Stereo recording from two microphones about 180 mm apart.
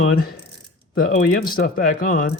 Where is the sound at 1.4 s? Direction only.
50° left (ahead or behind).